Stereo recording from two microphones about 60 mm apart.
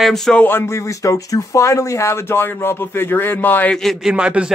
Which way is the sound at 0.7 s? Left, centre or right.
Left.